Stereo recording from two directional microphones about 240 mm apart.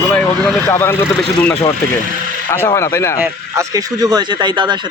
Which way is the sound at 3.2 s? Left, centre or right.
Centre.